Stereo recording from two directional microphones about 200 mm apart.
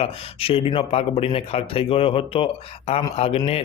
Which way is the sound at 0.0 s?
25° left (ahead or behind).